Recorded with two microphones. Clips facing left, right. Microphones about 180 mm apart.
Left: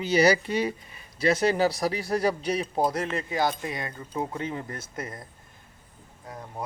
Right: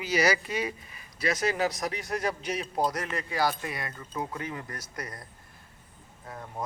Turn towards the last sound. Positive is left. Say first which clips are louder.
# left 1 dB
turn(degrees=15)  # may be behind; listen again after turning